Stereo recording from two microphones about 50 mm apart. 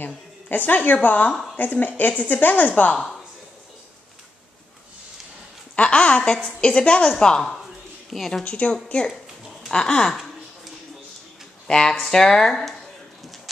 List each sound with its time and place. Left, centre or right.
0.0 s a woman's voice: left
2.9 s a woman's voice: centre
5.8 s speech: left
8.1 s a woman's voice: centre
8.5 s speech: left
9.1 s a sound: centre
11.6 s speech: centre